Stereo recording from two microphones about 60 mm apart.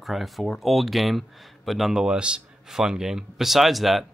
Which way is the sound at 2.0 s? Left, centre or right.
Centre.